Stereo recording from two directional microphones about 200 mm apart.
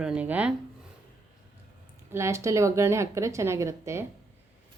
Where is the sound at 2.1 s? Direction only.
15° right (ahead or behind).